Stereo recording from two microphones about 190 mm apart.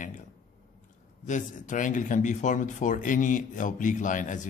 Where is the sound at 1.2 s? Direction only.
40° left (ahead or behind).